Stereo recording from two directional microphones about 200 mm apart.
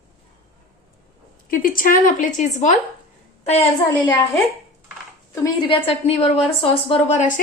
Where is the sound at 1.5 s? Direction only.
45° left (ahead or behind).